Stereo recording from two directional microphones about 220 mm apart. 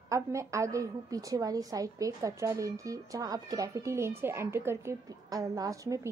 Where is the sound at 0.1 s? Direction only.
15° right (ahead or behind).